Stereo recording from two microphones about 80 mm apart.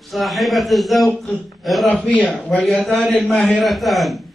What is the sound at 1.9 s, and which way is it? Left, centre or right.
Speech, centre.